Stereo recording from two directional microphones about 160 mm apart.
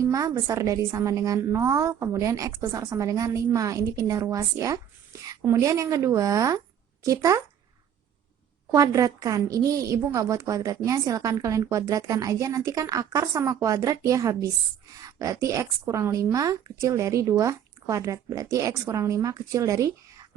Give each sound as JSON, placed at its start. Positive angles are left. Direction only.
{"t": 0.0, "sound": "a woman's voice", "side_deg": -20}
{"t": 8.7, "sound": "a woman's voice", "side_deg": -20}